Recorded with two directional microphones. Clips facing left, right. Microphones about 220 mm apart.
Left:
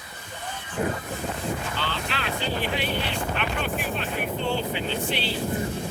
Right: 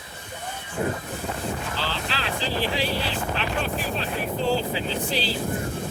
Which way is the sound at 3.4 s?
35° right (ahead or behind).